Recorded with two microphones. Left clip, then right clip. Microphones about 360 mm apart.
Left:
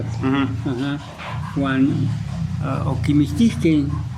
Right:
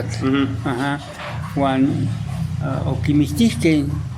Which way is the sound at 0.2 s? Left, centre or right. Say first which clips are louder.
Right 1 dB; centre.